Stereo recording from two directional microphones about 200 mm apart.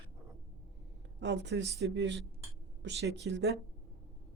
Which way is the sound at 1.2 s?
60° right (ahead or behind).